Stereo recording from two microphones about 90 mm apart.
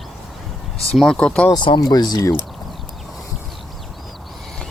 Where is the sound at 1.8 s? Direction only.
50° left (ahead or behind).